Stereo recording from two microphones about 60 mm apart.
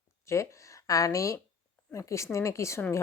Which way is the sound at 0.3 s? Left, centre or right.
Left.